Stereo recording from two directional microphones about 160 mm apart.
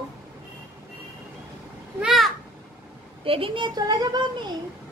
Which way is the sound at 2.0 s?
Centre (ahead or behind).